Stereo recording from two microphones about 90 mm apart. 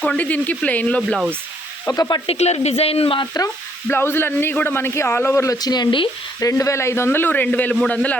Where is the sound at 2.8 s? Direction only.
90° left.